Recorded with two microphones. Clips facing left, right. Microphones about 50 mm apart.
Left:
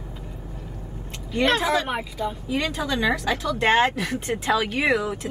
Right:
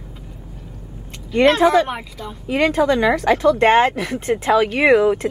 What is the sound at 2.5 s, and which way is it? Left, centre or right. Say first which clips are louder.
Speech: right 12 dB; right.